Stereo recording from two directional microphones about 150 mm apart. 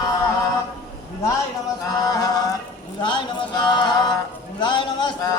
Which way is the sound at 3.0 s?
30° left (ahead or behind).